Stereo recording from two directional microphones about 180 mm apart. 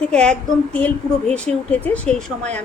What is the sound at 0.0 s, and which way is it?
A woman's voice, 5° left (ahead or behind).